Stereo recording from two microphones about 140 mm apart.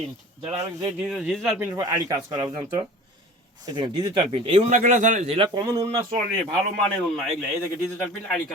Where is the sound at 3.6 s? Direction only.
35° right (ahead or behind).